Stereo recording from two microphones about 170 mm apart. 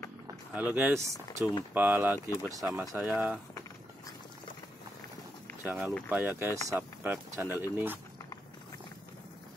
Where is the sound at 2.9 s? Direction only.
10° right (ahead or behind).